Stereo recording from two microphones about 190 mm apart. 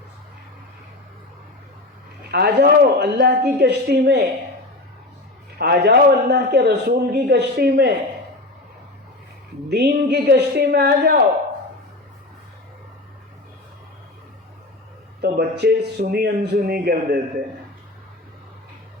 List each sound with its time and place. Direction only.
2.3 s a man's voice: 60° right (ahead or behind)
5.5 s a man's voice: 60° right (ahead or behind)
9.6 s a man's voice: 60° right (ahead or behind)
15.2 s a man's voice: 60° right (ahead or behind)